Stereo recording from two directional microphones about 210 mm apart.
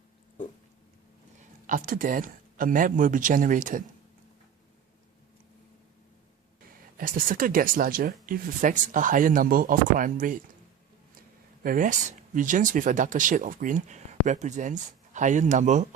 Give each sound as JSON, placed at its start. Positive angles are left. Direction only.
{"t": 1.6, "sound": "speech", "side_deg": -40}
{"t": 6.9, "sound": "speech", "side_deg": -40}
{"t": 11.6, "sound": "speech", "side_deg": -40}